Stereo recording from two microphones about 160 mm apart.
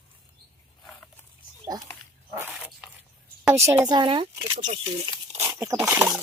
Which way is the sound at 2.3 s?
15° right (ahead or behind).